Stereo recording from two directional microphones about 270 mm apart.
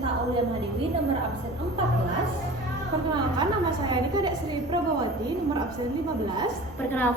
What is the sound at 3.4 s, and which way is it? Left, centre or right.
A woman's voice, centre.